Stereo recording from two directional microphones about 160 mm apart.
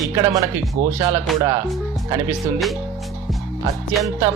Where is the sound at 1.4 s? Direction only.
25° right (ahead or behind).